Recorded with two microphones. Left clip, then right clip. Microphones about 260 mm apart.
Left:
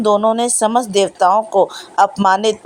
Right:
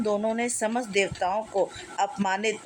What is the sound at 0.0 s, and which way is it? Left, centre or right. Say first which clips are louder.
Speech: left 13 dB; left.